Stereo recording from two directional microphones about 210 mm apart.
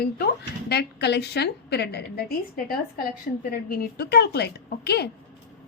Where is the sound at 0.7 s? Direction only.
50° left (ahead or behind).